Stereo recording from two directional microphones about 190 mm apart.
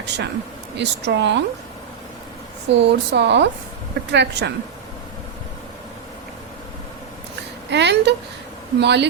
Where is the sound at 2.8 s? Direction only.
65° right (ahead or behind).